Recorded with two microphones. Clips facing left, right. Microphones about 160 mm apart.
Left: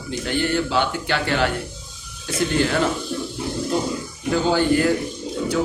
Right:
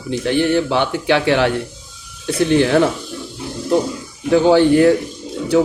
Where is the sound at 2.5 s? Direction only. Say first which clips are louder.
Right 7 dB; 65° right (ahead or behind).